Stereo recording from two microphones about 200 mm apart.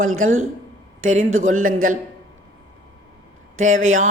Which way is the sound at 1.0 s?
40° right (ahead or behind).